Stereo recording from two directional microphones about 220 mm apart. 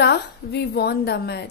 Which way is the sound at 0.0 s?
50° left (ahead or behind).